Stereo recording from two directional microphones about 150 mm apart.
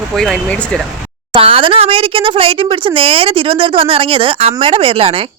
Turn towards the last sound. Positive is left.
turn(degrees=-40)  # may be behind; listen again after turning